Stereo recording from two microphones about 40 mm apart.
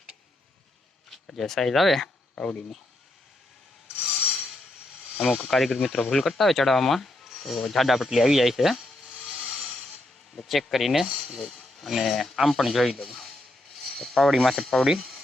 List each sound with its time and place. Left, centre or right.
1.1 s speech: centre
2.3 s speech: centre
5.1 s speech: centre